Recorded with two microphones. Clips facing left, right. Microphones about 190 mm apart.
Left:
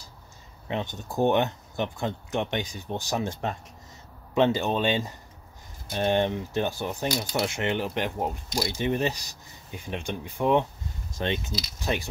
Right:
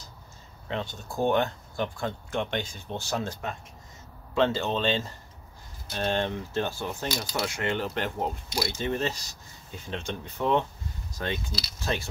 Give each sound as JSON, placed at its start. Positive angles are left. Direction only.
{"t": 0.7, "sound": "speech", "side_deg": 20}
{"t": 4.4, "sound": "speech", "side_deg": 15}
{"t": 11.1, "sound": "speech", "side_deg": 25}